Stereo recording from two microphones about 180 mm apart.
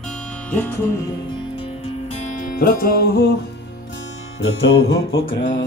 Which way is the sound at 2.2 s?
50° left (ahead or behind).